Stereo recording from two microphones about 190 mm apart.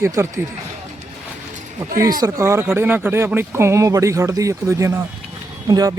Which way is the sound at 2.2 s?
15° right (ahead or behind).